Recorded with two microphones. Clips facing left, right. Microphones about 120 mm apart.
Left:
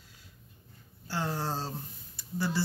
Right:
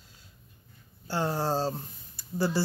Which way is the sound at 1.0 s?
30° right (ahead or behind).